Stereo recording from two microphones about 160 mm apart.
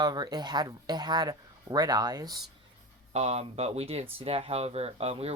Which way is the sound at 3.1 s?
40° right (ahead or behind).